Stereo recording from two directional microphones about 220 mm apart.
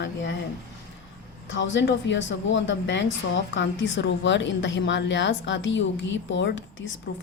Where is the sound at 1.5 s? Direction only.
55° left (ahead or behind).